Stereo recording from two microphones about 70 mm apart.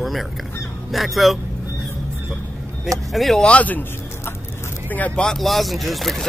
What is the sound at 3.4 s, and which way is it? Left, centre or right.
Speech, left.